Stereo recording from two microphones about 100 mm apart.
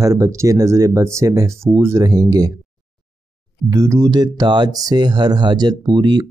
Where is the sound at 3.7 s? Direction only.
35° right (ahead or behind).